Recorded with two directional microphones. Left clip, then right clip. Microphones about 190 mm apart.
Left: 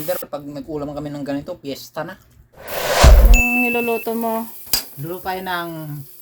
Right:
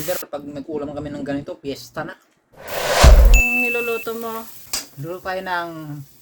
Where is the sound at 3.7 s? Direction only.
20° left (ahead or behind).